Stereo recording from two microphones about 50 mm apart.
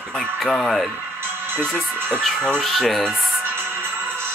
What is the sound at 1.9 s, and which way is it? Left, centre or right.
Speech, right.